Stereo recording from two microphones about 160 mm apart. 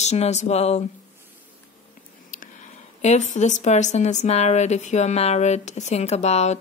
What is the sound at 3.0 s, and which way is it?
Speech, 45° left (ahead or behind).